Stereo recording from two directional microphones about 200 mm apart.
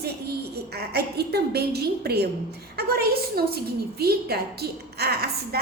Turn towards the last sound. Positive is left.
turn(degrees=-55)  # may be behind; listen again after turning